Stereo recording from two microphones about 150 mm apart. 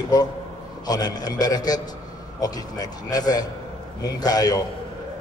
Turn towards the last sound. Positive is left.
turn(degrees=25)  # may be behind; listen again after turning